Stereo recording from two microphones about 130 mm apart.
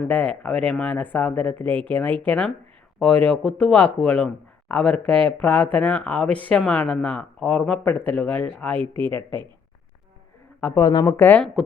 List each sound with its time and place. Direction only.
0.1 s speech: 10° left (ahead or behind)
10.8 s speech: 30° left (ahead or behind)
11.0 s speech: 15° left (ahead or behind)